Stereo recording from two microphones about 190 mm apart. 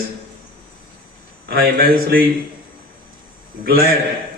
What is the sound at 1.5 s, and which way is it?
Speech, 50° right (ahead or behind).